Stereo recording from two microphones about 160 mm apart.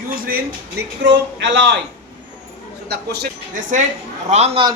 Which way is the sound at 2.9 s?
90° right.